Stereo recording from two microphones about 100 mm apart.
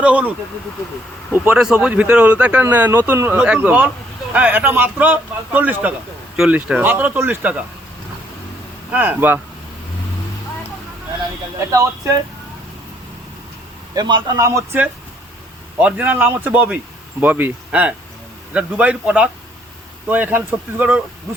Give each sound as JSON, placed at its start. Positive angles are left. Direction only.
{"t": 0.0, "sound": "speech", "side_deg": -15}
{"t": 1.8, "sound": "speech", "side_deg": -15}
{"t": 8.9, "sound": "speech", "side_deg": -15}
{"t": 11.6, "sound": "speech", "side_deg": -30}
{"t": 13.9, "sound": "a man's voice", "side_deg": -45}
{"t": 14.3, "sound": "speech", "side_deg": -30}
{"t": 15.8, "sound": "speech", "side_deg": -15}